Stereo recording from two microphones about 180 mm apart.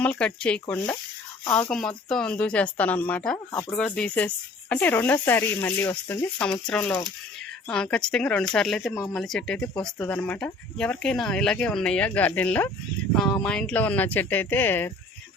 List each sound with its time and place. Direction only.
0.0 s speech: 5° left (ahead or behind)
3.3 s speech: 20° left (ahead or behind)
3.7 s speech: 5° left (ahead or behind)